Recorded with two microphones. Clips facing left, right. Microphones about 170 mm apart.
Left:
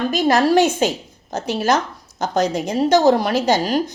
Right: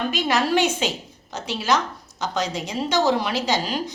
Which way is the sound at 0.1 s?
40° left (ahead or behind).